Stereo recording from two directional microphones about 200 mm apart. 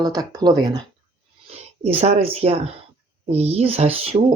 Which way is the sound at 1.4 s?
30° right (ahead or behind).